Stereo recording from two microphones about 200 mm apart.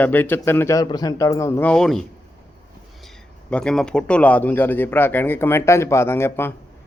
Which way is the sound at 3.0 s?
5° left (ahead or behind).